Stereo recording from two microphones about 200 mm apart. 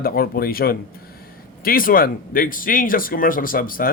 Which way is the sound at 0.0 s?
50° left (ahead or behind).